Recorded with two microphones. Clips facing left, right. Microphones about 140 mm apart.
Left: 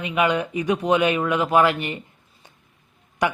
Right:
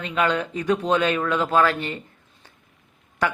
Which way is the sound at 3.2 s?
15° left (ahead or behind).